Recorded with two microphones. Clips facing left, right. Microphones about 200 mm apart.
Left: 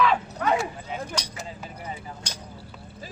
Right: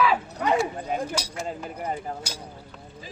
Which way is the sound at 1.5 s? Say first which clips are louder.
Right 6 dB; 55° right (ahead or behind).